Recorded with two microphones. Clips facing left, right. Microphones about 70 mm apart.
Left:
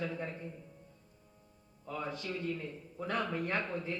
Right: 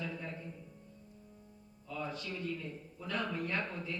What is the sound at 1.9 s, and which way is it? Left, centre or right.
Speech, left.